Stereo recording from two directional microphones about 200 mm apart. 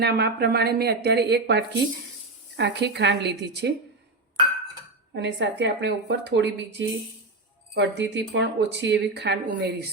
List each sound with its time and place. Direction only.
0.0 s speech: 55° right (ahead or behind)
5.1 s speech: 60° right (ahead or behind)